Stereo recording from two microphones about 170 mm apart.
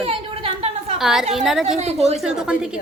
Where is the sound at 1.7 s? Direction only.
40° right (ahead or behind).